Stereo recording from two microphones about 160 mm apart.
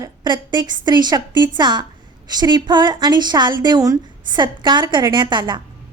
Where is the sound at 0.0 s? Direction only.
25° right (ahead or behind).